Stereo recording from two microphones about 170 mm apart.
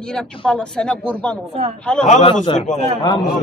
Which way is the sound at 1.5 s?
35° right (ahead or behind).